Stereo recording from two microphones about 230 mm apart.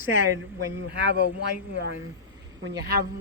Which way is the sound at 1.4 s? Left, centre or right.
Right.